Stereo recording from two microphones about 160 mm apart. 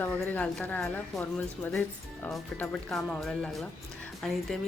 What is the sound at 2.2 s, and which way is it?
Speech, 5° left (ahead or behind).